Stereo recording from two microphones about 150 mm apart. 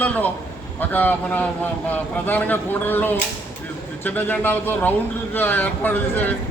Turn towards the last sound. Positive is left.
turn(degrees=10)  # may be behind; listen again after turning